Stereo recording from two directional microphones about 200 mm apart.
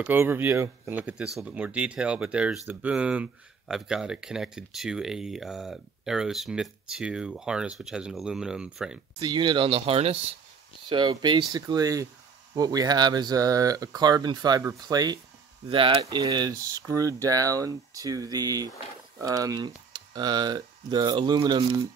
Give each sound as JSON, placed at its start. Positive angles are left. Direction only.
{"t": 0.0, "sound": "speech", "side_deg": -10}
{"t": 9.2, "sound": "speech", "side_deg": -20}